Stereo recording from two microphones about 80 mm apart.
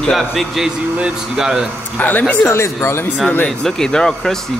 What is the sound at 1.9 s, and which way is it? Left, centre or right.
Speech, left.